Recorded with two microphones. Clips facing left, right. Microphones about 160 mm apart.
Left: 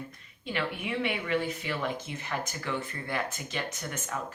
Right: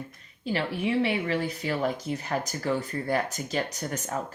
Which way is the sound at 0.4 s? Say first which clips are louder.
Right 5 dB; 35° right (ahead or behind).